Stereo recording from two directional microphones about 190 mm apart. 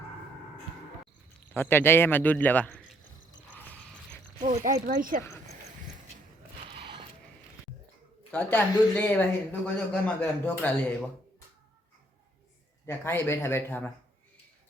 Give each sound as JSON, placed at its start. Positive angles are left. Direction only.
{"t": 1.5, "sound": "speech", "side_deg": 10}
{"t": 4.4, "sound": "zipper", "side_deg": -40}
{"t": 4.9, "sound": "speech", "side_deg": -45}
{"t": 6.7, "sound": "a sound", "side_deg": -25}
{"t": 8.3, "sound": "speech", "side_deg": 10}
{"t": 12.8, "sound": "speech", "side_deg": 10}